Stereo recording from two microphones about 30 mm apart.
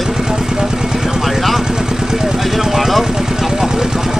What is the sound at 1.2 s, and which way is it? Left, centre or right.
Vehicle, centre.